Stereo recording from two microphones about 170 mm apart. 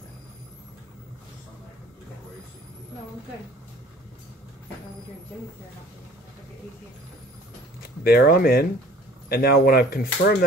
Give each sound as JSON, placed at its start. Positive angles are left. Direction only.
{"t": 8.0, "sound": "speech", "side_deg": 65}